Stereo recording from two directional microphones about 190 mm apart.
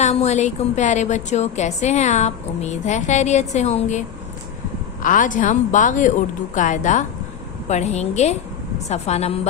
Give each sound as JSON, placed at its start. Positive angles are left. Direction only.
{"t": 0.0, "sound": "a woman's voice", "side_deg": 35}
{"t": 5.0, "sound": "a woman's voice", "side_deg": 45}